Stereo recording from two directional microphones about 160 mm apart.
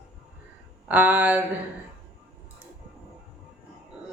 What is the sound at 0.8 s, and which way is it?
Music, 10° right (ahead or behind).